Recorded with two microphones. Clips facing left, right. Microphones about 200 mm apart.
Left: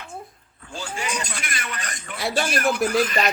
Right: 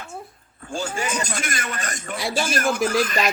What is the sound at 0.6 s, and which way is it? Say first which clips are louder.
A man's voice: right 4 dB; 45° right (ahead or behind).